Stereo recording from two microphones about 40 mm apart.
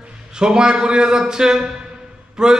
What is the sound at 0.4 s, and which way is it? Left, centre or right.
A man's voice, centre.